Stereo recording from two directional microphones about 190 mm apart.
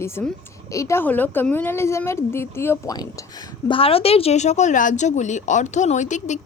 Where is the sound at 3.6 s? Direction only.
30° left (ahead or behind).